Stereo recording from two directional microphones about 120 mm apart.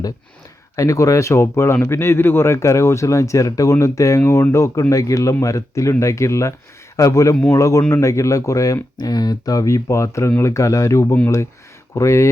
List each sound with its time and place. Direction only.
0.8 s speech: 25° left (ahead or behind)